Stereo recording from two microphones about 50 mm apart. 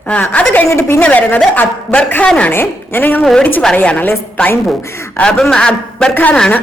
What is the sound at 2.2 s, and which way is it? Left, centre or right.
Speech, left.